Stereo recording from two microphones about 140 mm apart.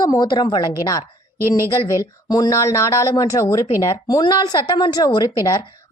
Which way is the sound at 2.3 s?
25° left (ahead or behind).